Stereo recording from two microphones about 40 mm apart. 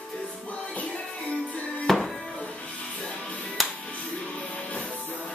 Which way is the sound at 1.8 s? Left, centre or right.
Centre.